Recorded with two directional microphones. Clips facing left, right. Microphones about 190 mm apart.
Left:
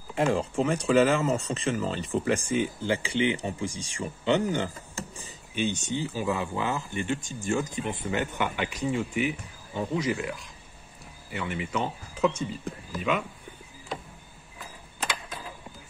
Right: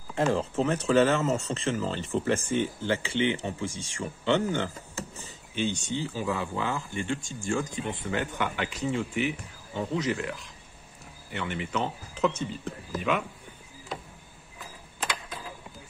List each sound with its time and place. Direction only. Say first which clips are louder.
0.1 s speech: left 1 dB; 10° left (ahead or behind)
11.3 s speech: even; 10° left (ahead or behind)